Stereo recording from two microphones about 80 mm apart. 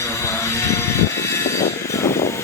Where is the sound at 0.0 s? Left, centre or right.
Left.